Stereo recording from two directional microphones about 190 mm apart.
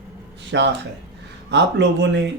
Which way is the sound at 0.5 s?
75° right (ahead or behind).